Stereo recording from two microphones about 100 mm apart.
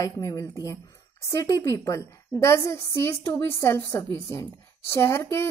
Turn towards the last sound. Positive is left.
turn(degrees=25)  # may be behind; listen again after turning